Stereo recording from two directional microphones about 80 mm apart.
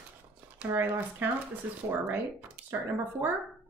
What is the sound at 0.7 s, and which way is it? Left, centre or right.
Speech, right.